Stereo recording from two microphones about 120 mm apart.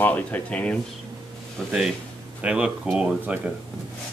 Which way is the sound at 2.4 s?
10° right (ahead or behind).